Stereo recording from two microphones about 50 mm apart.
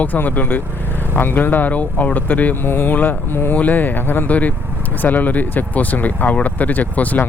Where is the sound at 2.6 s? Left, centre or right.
Left.